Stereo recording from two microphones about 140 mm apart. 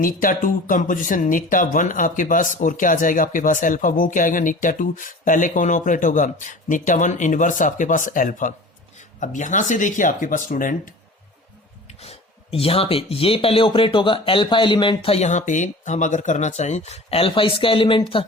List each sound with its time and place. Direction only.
0.0 s speech: 80° left
11.9 s speech: 45° left (ahead or behind)